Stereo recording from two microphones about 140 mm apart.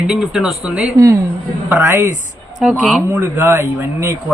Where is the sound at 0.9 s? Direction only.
20° right (ahead or behind).